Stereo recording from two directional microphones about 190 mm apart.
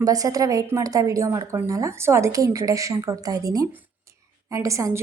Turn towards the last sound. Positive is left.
turn(degrees=-15)  # may be behind; listen again after turning